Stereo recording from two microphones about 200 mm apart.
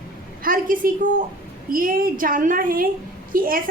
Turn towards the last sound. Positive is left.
turn(degrees=-45)  # may be behind; listen again after turning